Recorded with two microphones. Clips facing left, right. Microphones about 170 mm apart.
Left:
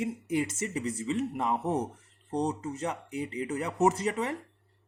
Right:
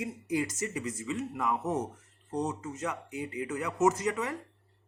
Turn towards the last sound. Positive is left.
turn(degrees=30)  # may be behind; listen again after turning